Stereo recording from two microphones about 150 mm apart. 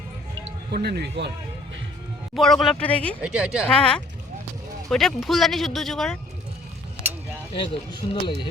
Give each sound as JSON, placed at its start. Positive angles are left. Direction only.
{"t": 0.7, "sound": "speech", "side_deg": -90}
{"t": 2.3, "sound": "speech", "side_deg": 0}
{"t": 3.2, "sound": "a woman's voice", "side_deg": -5}
{"t": 3.7, "sound": "speech", "side_deg": 5}
{"t": 7.5, "sound": "speech", "side_deg": 35}